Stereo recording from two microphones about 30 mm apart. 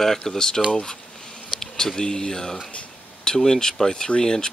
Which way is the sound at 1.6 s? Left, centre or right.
Centre.